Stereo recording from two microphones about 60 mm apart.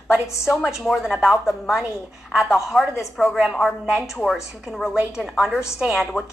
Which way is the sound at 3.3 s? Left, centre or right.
Centre.